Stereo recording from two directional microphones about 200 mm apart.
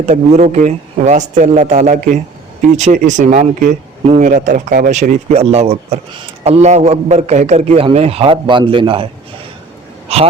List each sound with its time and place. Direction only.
0.0 s a man's voice: 35° right (ahead or behind)
10.1 s a man's voice: 30° right (ahead or behind)